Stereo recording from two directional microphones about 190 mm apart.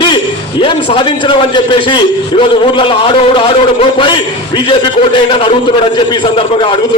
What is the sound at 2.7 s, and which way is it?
A man's voice, 25° left (ahead or behind).